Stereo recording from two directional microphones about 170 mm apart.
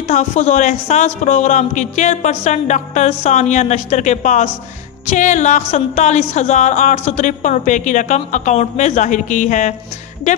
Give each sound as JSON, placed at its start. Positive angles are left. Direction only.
{"t": 0.0, "sound": "a woman's voice", "side_deg": 45}